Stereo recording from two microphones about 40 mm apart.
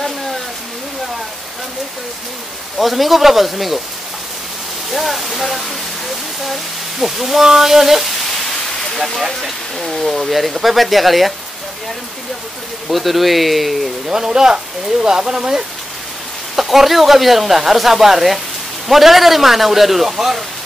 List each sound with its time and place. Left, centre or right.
2.8 s speech: centre
4.9 s speech: centre
6.4 s a sound: centre
8.9 s speech: centre
12.8 s speech: centre
14.0 s speech: centre
16.5 s speech: centre